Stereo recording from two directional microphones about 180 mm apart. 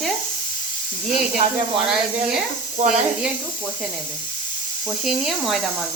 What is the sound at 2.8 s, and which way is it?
Speech, 40° right (ahead or behind).